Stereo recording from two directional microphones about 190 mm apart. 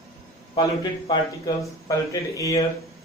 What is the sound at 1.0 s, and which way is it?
A man's voice, 25° left (ahead or behind).